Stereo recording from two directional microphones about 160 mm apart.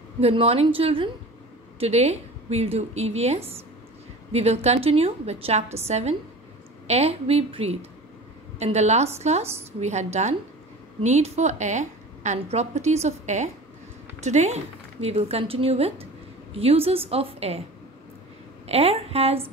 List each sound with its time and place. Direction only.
0.2 s a woman's voice: 40° right (ahead or behind)
18.7 s a woman's voice: 40° right (ahead or behind)